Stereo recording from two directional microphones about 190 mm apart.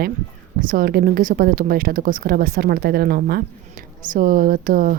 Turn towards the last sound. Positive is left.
turn(degrees=-45)  # may be behind; listen again after turning